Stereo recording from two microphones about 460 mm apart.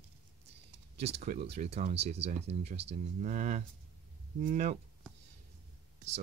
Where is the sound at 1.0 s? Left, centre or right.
Centre.